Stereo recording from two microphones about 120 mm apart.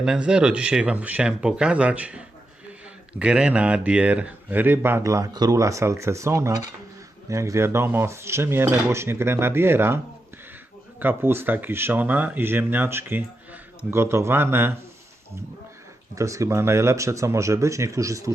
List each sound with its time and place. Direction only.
0.0 s speech: 5° right (ahead or behind)
11.0 s speech: 15° right (ahead or behind)
16.1 s speech: 25° right (ahead or behind)